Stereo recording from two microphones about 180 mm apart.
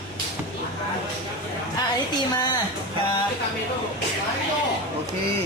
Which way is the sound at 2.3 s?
25° left (ahead or behind).